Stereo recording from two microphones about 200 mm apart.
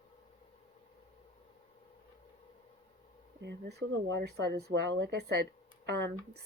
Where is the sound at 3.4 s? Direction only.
60° right (ahead or behind).